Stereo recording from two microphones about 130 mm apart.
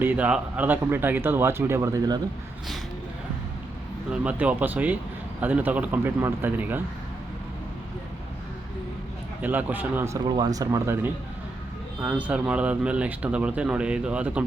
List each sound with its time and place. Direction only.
0.0 s a man's voice: 15° right (ahead or behind); by 2.2 s 30° right (ahead or behind)
4.1 s a man's voice: 10° right (ahead or behind)
9.4 s a man's voice: 10° right (ahead or behind)